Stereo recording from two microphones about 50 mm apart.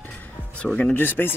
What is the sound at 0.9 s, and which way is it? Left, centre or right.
Speech, left.